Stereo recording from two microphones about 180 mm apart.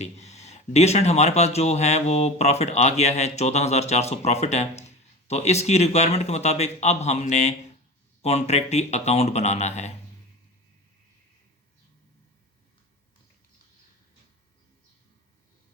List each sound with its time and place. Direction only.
0.0 s speech: 40° left (ahead or behind)